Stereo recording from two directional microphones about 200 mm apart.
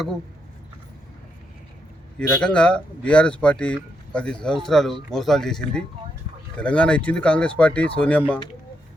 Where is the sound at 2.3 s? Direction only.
5° left (ahead or behind).